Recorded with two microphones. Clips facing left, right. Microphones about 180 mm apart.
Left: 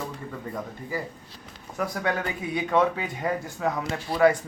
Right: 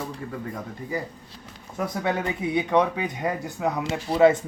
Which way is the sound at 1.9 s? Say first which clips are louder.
Right 3 dB; 25° right (ahead or behind).